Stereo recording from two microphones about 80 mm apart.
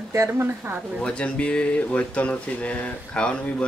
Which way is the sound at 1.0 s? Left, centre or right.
Centre.